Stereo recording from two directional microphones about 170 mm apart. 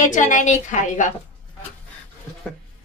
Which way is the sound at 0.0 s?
45° left (ahead or behind).